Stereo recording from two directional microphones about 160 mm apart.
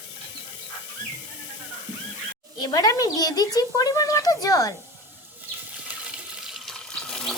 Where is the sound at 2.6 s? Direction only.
25° left (ahead or behind).